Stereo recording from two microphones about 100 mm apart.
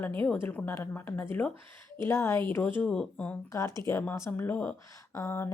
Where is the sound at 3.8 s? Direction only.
25° left (ahead or behind).